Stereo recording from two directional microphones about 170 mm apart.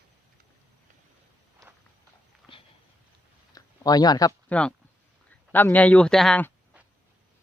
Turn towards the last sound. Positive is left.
turn(degrees=5)  # may be behind; listen again after turning